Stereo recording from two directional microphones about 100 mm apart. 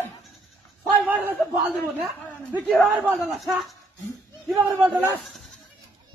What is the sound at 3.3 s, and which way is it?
Speech, centre (ahead or behind).